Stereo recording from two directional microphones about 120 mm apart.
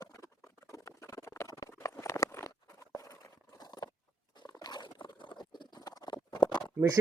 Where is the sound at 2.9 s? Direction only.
25° left (ahead or behind).